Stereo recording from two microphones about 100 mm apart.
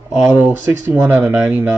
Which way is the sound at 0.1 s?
15° right (ahead or behind).